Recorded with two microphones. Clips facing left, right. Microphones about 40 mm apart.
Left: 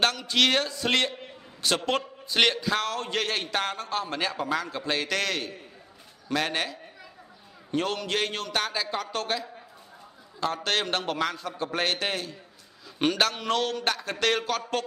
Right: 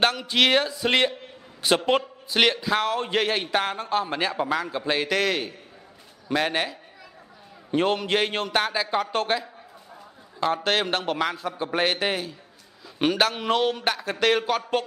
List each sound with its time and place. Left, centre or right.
0.0 s a man's voice: centre
9.0 s a man's voice: right
10.6 s a man's voice: centre